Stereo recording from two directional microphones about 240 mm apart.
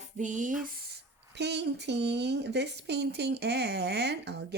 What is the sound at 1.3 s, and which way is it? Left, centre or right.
Speech, right.